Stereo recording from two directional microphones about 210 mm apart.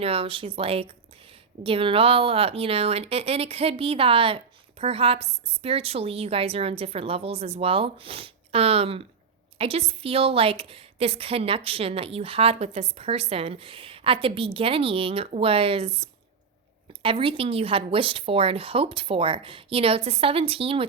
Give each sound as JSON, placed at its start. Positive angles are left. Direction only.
{"t": 0.0, "sound": "speech", "side_deg": -25}